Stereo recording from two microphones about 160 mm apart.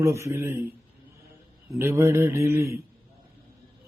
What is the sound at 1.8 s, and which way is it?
Speech, 15° right (ahead or behind).